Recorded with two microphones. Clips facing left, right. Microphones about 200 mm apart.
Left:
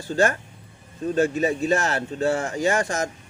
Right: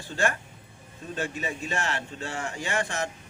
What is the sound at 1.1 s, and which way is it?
Speech, 40° left (ahead or behind).